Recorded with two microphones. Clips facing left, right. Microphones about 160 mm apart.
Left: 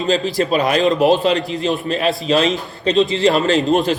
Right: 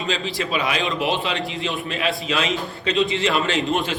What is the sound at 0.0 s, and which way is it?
A man's voice, 40° left (ahead or behind).